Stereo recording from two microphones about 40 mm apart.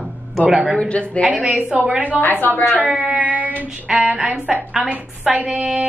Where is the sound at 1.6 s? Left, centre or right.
Right.